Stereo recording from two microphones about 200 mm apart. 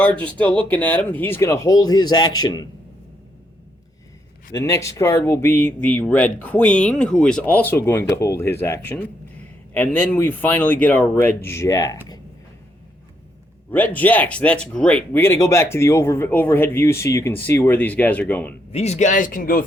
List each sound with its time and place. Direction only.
0.0 s speech: 5° left (ahead or behind)
4.5 s speech: 15° left (ahead or behind)
13.7 s speech: 10° left (ahead or behind)
18.7 s speech: 30° left (ahead or behind)